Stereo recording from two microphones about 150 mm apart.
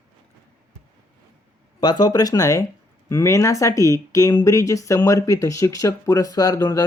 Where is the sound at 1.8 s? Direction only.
25° left (ahead or behind).